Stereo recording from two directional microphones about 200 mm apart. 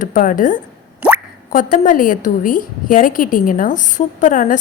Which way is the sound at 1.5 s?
40° left (ahead or behind).